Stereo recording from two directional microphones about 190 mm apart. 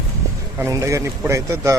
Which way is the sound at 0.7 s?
15° right (ahead or behind).